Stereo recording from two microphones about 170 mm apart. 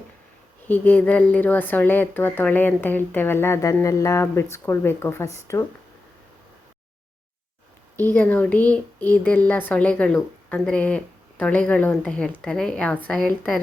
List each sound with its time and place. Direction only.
0.7 s speech: 10° left (ahead or behind)
7.9 s speech: 10° left (ahead or behind)